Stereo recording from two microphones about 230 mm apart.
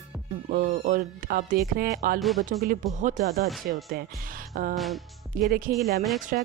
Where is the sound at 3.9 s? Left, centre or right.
Right.